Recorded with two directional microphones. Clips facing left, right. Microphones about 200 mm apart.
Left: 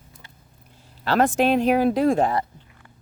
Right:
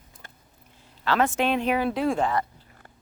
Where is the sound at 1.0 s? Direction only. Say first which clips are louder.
Left 4 dB; 40° left (ahead or behind).